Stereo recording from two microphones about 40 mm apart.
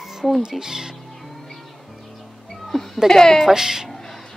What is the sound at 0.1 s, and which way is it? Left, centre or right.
Music, centre.